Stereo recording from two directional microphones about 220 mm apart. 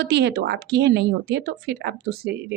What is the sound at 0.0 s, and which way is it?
A woman's voice, 50° right (ahead or behind).